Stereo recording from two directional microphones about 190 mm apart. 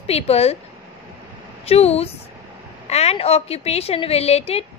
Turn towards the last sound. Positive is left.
turn(degrees=30)  # may be behind; listen again after turning